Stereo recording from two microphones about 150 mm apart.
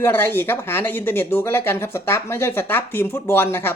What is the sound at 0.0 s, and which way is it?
Speech, 15° left (ahead or behind).